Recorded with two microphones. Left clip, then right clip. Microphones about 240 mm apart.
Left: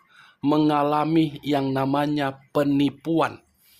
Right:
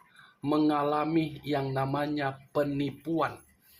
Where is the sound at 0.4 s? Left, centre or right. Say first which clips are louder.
Left 6 dB; left.